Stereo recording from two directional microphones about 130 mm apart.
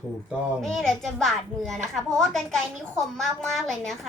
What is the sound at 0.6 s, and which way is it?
A woman's voice, 5° left (ahead or behind).